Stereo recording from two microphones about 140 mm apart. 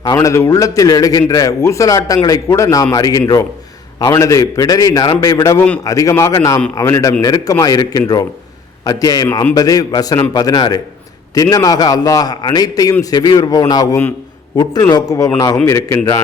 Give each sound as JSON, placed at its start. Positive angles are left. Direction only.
{"t": 0.0, "sound": "a man's voice", "side_deg": 25}